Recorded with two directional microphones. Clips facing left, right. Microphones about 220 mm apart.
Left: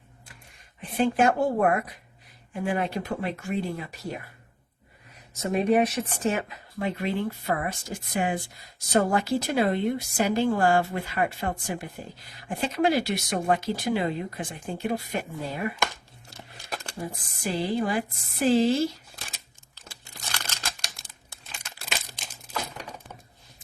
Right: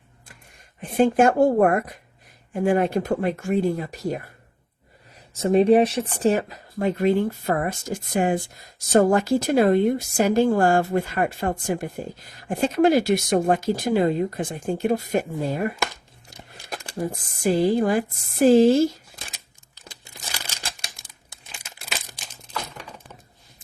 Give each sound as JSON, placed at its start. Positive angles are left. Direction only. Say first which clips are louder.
{"t": 0.8, "sound": "speech", "louder": "right 5 dB", "side_deg": -45}
{"t": 5.3, "sound": "speech", "louder": "right 7 dB", "side_deg": -30}
{"t": 17.0, "sound": "speech", "louder": "right 10 dB", "side_deg": -50}
{"t": 19.7, "sound": "crumpling", "louder": "right 2 dB", "side_deg": -10}
{"t": 20.9, "sound": "crumpling", "louder": "even", "side_deg": 0}